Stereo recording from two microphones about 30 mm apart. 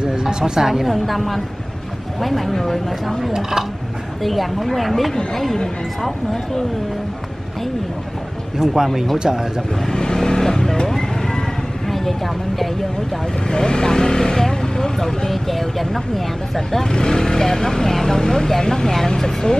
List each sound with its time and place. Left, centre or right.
0.1 s a sound: right
0.8 s speech: centre
3.3 s speech: centre
4.2 s speech: centre
8.5 s speech: centre
10.1 s vehicle: centre
11.9 s speech: centre
13.5 s speech: left; by 16.8 s centre
16.8 s speech: left